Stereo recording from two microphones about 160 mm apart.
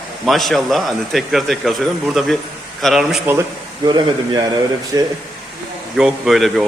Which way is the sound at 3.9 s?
25° right (ahead or behind).